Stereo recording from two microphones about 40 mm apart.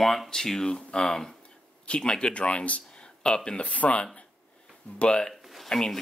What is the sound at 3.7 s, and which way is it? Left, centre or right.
Speech, left.